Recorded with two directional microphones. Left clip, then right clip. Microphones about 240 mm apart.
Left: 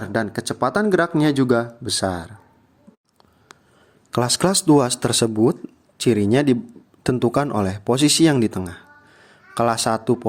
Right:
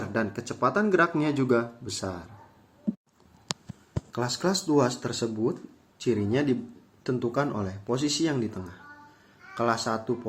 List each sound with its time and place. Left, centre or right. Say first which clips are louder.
0.1 s speech: left 9 dB; left
4.1 s speech: left 9 dB; left